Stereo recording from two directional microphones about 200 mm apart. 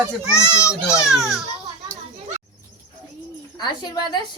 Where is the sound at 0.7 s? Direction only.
5° right (ahead or behind).